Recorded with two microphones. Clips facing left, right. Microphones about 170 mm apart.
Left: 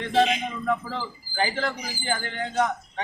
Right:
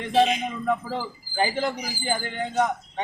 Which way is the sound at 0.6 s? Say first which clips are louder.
Right 1 dB; 15° right (ahead or behind).